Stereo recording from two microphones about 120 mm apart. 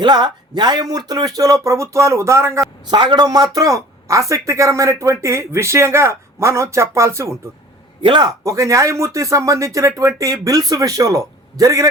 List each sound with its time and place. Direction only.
0.0 s a man's voice: 40° right (ahead or behind)
2.9 s a man's voice: 40° right (ahead or behind); by 7.3 s 25° right (ahead or behind)
8.0 s a man's voice: 35° right (ahead or behind)